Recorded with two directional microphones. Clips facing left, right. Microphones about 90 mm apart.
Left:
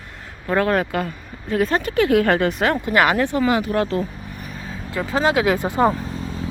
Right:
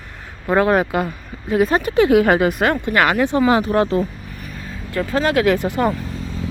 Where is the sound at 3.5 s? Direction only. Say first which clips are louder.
Right 4 dB; 30° right (ahead or behind).